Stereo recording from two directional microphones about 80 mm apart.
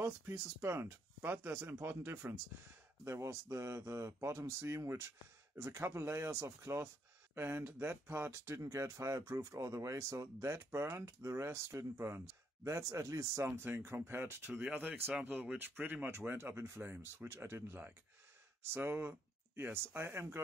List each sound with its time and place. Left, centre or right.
0.0 s speech: right
8.5 s speech: right
13.5 s speech: right